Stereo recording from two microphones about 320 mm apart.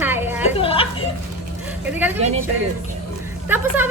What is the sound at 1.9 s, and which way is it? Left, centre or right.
Speech, centre.